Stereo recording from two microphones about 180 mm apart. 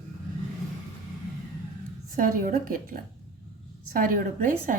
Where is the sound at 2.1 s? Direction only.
50° right (ahead or behind).